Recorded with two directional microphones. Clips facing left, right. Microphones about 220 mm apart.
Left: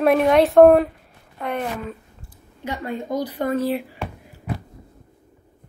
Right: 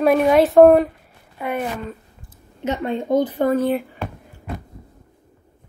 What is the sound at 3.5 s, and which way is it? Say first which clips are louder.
Speech: right 3 dB; 30° left (ahead or behind).